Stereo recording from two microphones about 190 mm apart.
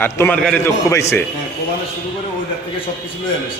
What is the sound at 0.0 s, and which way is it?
A man's voice, 10° left (ahead or behind).